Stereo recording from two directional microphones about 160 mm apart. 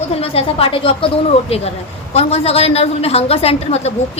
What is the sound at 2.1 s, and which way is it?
A woman's voice, 40° left (ahead or behind).